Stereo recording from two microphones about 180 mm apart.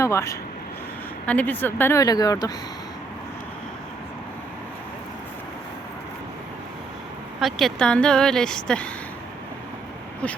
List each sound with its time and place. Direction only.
0.0 s speech: 15° left (ahead or behind)
7.3 s speech: centre (ahead or behind)